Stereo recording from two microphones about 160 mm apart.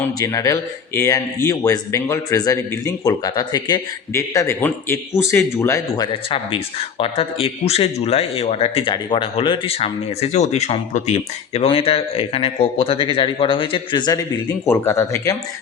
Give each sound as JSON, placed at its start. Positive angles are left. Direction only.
{"t": 0.2, "sound": "speech", "side_deg": 20}
{"t": 6.3, "sound": "speech", "side_deg": 35}
{"t": 14.7, "sound": "speech", "side_deg": 15}